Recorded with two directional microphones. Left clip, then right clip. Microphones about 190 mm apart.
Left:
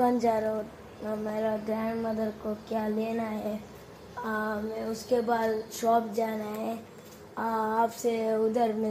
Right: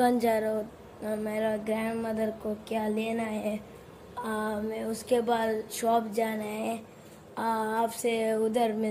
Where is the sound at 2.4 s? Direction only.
20° right (ahead or behind).